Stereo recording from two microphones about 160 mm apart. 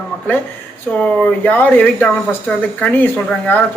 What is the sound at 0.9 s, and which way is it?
Speech, 10° left (ahead or behind).